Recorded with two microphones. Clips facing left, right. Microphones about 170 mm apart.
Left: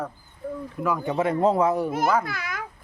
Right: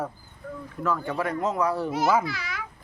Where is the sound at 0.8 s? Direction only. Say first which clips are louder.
Left 3 dB; 15° left (ahead or behind); by 1.7 s 30° left (ahead or behind).